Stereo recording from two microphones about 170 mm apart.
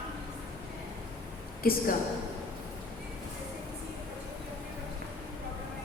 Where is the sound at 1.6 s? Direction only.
60° left (ahead or behind).